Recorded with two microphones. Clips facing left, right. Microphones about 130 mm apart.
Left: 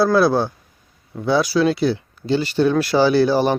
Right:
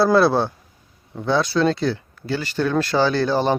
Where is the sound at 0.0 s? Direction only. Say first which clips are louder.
Even; centre (ahead or behind).